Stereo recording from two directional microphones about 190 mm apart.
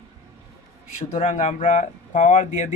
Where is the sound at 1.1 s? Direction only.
35° left (ahead or behind).